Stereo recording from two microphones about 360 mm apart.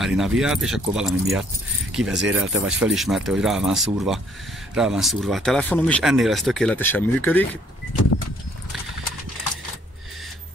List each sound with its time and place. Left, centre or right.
0.0 s speech: centre